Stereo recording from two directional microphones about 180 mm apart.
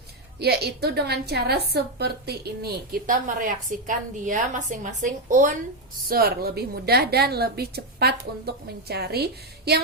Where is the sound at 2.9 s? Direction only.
50° right (ahead or behind).